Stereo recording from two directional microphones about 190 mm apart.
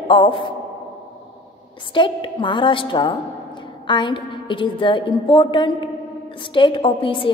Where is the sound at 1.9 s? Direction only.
25° left (ahead or behind).